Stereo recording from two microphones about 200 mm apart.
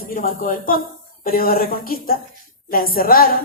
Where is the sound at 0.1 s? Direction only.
45° left (ahead or behind).